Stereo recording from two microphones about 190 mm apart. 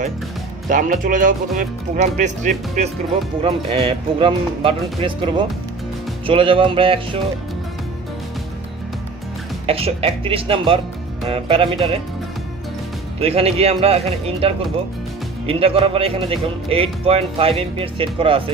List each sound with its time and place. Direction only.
0.7 s speech: 45° right (ahead or behind)
3.4 s speech: 30° right (ahead or behind)
9.7 s speech: 30° right (ahead or behind)
13.2 s a man's voice: 30° right (ahead or behind)